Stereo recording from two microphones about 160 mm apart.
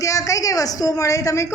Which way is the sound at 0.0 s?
20° left (ahead or behind).